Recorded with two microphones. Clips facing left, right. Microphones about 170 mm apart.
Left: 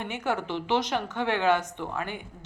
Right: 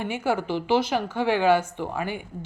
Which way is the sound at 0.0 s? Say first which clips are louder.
Right 4 dB; 10° right (ahead or behind).